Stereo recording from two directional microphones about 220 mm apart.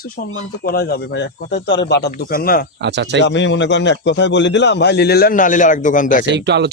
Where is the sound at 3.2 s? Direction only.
55° left (ahead or behind); by 6.2 s 35° left (ahead or behind).